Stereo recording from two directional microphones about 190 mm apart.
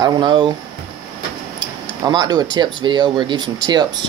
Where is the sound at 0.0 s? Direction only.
25° right (ahead or behind).